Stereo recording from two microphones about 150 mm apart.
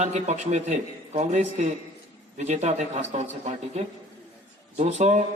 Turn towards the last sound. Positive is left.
turn(degrees=-50)  # may be behind; listen again after turning